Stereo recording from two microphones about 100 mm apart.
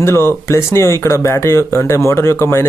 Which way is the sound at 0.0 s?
25° left (ahead or behind).